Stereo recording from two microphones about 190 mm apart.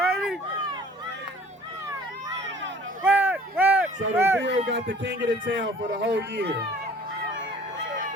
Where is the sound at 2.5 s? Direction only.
75° right (ahead or behind).